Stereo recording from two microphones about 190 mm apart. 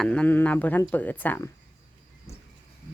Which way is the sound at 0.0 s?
5° left (ahead or behind).